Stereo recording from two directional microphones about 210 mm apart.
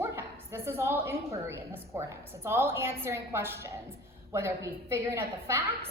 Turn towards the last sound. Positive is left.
turn(degrees=-15)  # may be behind; listen again after turning